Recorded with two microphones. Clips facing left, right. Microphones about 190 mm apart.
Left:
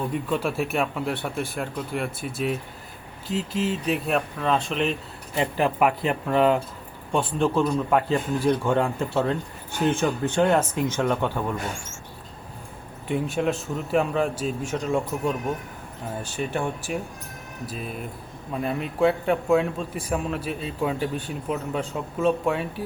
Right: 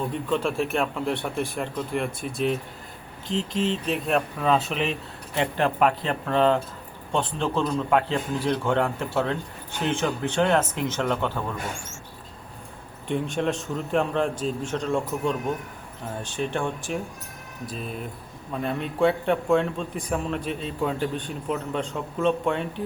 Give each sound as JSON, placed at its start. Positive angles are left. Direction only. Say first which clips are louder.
{"t": 0.1, "sound": "a man's voice", "louder": "even", "side_deg": 5}
{"t": 13.1, "sound": "a man's voice", "louder": "left 1 dB", "side_deg": 5}